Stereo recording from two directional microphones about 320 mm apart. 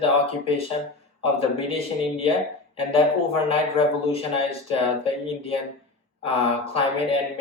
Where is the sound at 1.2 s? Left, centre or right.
Centre.